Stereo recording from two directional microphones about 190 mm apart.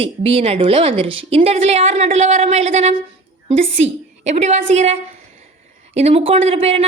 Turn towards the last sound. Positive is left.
turn(degrees=-30)  # may be behind; listen again after turning